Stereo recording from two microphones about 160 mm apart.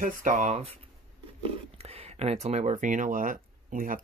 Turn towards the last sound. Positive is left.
turn(degrees=-60)  # may be behind; listen again after turning